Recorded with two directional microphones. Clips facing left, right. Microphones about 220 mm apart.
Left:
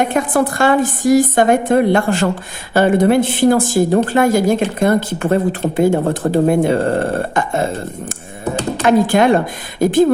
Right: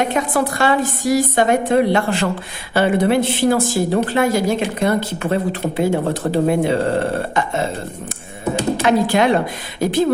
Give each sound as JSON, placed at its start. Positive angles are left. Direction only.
{"t": 0.0, "sound": "a woman's voice", "side_deg": 50}
{"t": 8.8, "sound": "a woman's voice", "side_deg": 50}